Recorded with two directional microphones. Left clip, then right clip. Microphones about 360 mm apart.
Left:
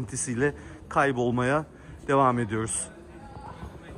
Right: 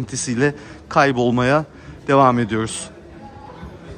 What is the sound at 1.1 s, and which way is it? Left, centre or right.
Speech, right.